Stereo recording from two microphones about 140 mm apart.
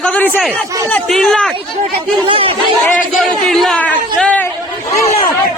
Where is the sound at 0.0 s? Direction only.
10° left (ahead or behind).